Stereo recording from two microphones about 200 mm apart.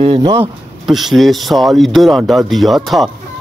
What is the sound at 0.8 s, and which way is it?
Speech, centre (ahead or behind).